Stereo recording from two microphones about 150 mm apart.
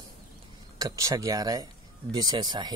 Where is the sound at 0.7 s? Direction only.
25° right (ahead or behind).